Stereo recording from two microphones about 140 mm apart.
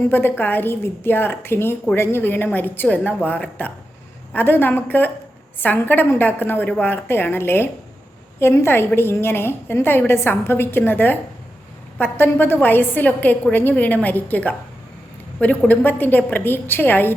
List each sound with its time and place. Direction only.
0.1 s a woman's voice: 15° left (ahead or behind)